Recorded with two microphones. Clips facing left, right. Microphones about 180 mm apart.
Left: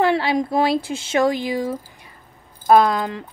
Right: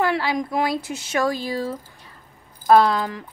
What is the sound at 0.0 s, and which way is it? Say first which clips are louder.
Speech: left 4 dB; 25° left (ahead or behind).